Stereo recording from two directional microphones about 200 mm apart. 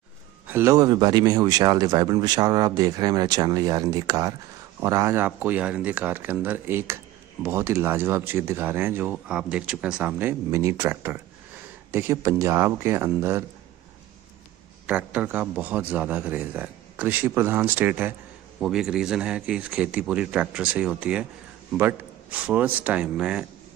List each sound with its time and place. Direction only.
0.5 s speech: 15° right (ahead or behind)
14.9 s speech: 5° right (ahead or behind)